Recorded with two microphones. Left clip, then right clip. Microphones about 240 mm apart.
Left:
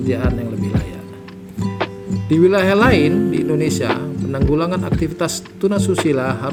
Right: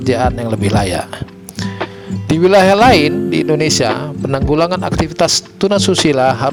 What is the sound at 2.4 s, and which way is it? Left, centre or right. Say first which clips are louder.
Speech: right 5 dB; right.